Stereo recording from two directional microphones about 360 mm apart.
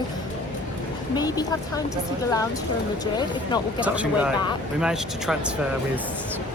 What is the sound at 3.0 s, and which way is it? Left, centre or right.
Speech, centre.